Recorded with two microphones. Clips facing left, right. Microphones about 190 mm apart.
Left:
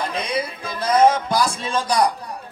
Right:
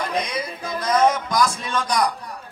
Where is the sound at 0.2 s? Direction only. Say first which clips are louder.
Left 3 dB; 30° left (ahead or behind).